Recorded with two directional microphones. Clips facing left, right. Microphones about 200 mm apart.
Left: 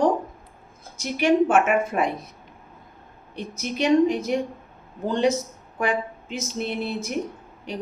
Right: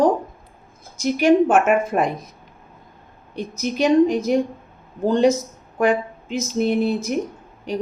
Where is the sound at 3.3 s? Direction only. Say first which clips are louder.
Right 5 dB; 45° right (ahead or behind).